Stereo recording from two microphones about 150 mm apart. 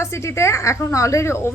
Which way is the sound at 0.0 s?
20° left (ahead or behind).